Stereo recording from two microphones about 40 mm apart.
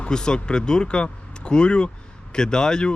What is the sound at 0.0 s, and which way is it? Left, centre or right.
Speech, centre.